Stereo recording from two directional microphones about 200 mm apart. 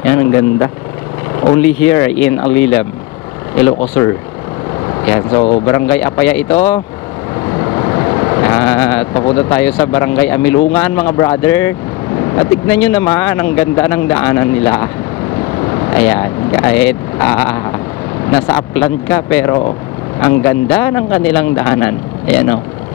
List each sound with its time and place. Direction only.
0.0 s speech: 15° left (ahead or behind)
1.9 s speech: 15° left (ahead or behind)
5.1 s speech: 25° left (ahead or behind)
5.8 s speech: 15° left (ahead or behind)
12.2 s vehicle: 20° left (ahead or behind)
12.7 s speech: 10° left (ahead or behind)